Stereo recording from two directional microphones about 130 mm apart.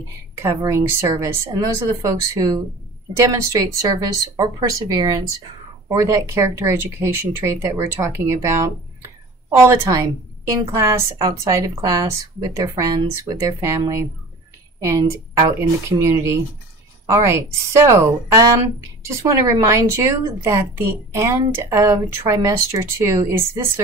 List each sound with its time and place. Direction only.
0.4 s a woman's voice: 25° right (ahead or behind)
9.6 s a woman's voice: 20° right (ahead or behind)